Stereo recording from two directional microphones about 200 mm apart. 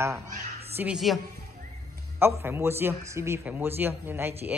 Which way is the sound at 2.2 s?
10° right (ahead or behind).